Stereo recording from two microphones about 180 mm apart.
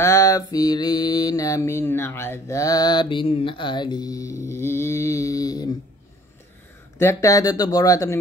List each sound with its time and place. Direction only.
0.0 s mantra: 20° left (ahead or behind)
7.0 s mantra: 15° left (ahead or behind)